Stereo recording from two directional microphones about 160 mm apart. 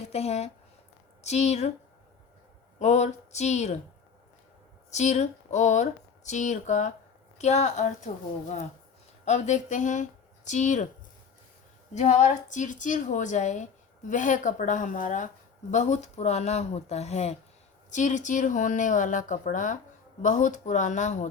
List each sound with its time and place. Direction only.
0.0 s speech: 40° left (ahead or behind)
2.7 s speech: 45° left (ahead or behind)
4.9 s speech: 45° left (ahead or behind)
11.9 s speech: 45° left (ahead or behind)